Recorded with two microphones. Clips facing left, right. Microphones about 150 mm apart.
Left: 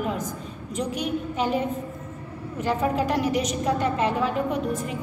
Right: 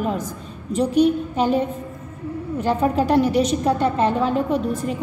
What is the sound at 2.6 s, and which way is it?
A woman's voice, 30° right (ahead or behind).